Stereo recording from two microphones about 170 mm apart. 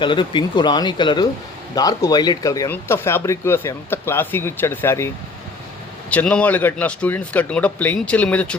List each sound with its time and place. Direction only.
0.0 s speech: 30° left (ahead or behind); by 8.5 s 10° left (ahead or behind)